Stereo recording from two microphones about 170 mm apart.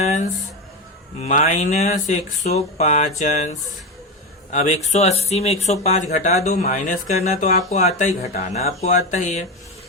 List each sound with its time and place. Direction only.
0.0 s a sound: 45° left (ahead or behind)
1.2 s speech: 45° left (ahead or behind)
4.5 s speech: 45° left (ahead or behind)